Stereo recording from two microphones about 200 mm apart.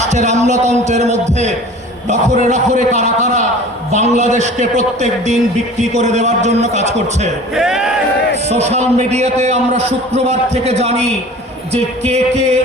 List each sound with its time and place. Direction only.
0.0 s a man's voice: 35° right (ahead or behind)
7.5 s speech: centre (ahead or behind)
8.4 s a man's voice: 35° right (ahead or behind)